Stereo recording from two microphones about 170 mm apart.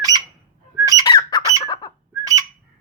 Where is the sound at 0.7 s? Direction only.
20° right (ahead or behind).